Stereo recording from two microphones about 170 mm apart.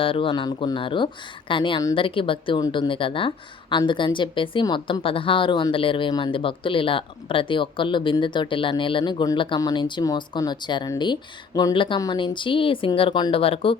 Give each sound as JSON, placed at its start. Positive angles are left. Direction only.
{"t": 0.0, "sound": "speech", "side_deg": 30}